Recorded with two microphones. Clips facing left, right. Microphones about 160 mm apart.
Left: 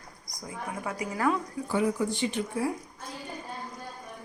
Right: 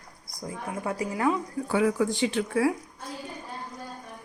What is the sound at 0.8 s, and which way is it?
Speech, 25° right (ahead or behind).